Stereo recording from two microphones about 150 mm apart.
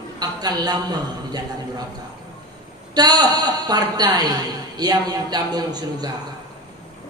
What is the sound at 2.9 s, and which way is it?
A woman's voice, 25° right (ahead or behind).